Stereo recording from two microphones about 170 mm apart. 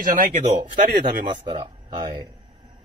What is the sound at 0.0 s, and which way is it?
Speech, 50° right (ahead or behind).